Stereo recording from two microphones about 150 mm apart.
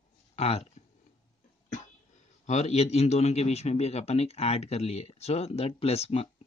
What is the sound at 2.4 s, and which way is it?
A man's voice, 50° left (ahead or behind).